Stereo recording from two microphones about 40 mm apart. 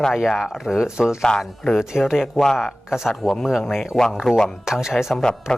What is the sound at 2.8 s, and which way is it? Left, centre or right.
Speech, centre.